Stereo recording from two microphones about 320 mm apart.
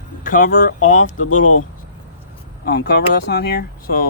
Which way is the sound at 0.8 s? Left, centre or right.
Left.